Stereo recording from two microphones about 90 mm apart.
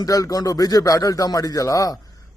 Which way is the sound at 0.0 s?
40° left (ahead or behind).